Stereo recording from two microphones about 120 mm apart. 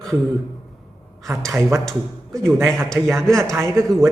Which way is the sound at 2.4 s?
20° right (ahead or behind).